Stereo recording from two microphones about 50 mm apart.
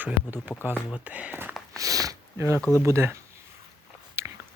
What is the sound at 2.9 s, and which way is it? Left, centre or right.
Speech, right.